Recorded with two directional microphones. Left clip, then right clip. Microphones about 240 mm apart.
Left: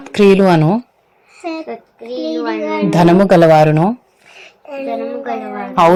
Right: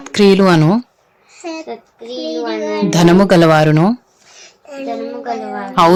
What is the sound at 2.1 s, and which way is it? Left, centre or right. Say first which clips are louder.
Speech: left 1 dB; centre.